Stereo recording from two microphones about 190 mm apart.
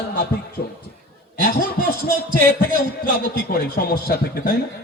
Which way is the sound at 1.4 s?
50° left (ahead or behind).